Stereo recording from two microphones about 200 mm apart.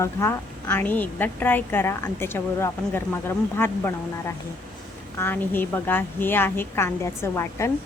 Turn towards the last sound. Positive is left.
turn(degrees=15)  # may be behind; listen again after turning